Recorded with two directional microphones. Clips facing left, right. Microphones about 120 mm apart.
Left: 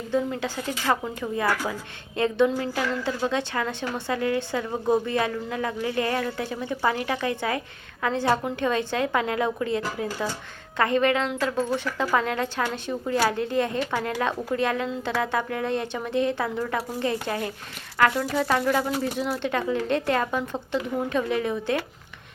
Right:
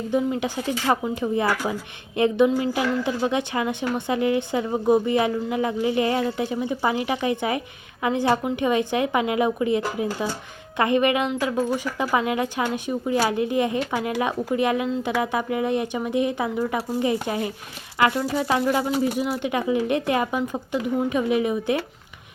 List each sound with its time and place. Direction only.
0.1 s a woman's voice: 15° right (ahead or behind)